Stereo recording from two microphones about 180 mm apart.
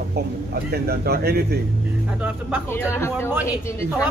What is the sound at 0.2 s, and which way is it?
A man's voice, 60° right (ahead or behind).